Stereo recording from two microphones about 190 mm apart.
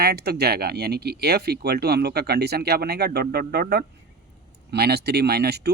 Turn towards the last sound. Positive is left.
turn(degrees=-60)  # may be behind; listen again after turning